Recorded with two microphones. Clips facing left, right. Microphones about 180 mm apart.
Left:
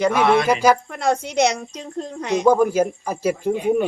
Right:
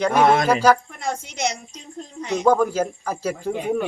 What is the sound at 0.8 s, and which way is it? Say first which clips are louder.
A woman's voice: left 7 dB; 70° left (ahead or behind).